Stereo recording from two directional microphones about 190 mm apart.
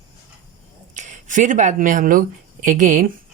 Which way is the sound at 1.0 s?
40° right (ahead or behind).